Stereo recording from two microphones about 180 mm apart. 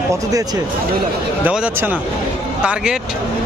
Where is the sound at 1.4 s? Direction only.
10° right (ahead or behind).